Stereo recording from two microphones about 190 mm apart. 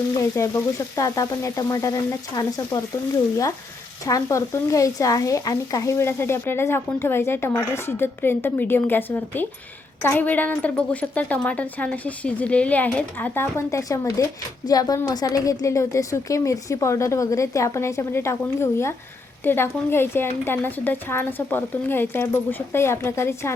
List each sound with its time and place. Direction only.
0.1 s speech: 15° left (ahead or behind)